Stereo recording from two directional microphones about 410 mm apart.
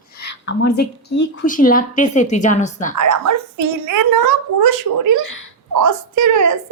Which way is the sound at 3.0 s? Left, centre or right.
Right.